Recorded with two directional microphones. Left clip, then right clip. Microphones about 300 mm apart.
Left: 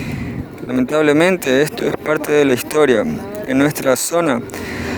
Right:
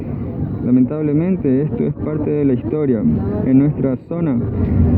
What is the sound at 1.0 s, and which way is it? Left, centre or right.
Speech, left.